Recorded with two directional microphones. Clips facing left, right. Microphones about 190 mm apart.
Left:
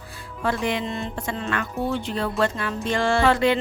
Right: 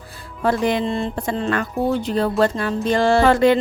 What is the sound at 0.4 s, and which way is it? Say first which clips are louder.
Speech: right 6 dB; 40° right (ahead or behind).